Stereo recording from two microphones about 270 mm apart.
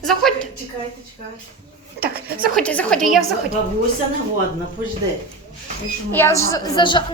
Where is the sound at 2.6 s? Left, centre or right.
Centre.